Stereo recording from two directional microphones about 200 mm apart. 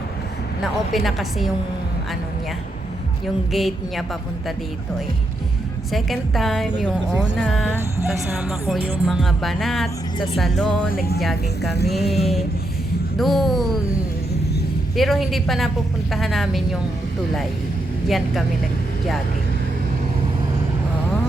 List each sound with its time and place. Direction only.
0.6 s speech: centre (ahead or behind)
3.5 s speech: centre (ahead or behind)
5.9 s speech: centre (ahead or behind)
10.9 s speech: 50° left (ahead or behind)
11.2 s speech: centre (ahead or behind)
14.9 s speech: centre (ahead or behind)